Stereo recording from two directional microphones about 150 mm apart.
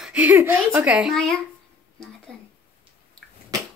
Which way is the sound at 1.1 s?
5° left (ahead or behind).